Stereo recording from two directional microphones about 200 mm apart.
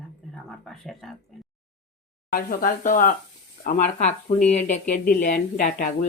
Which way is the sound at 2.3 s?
45° left (ahead or behind).